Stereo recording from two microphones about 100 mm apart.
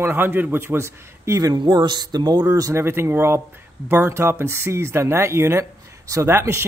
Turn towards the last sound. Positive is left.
turn(degrees=-25)  # may be behind; listen again after turning